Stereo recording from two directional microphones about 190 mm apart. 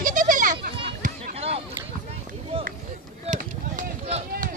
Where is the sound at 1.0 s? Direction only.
35° right (ahead or behind).